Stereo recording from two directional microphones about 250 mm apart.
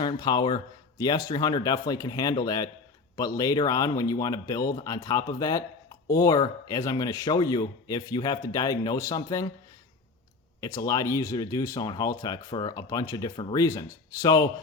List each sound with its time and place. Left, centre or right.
0.0 s speech: centre
10.6 s speech: centre